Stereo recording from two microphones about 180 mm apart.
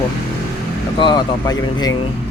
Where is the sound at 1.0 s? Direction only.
25° left (ahead or behind).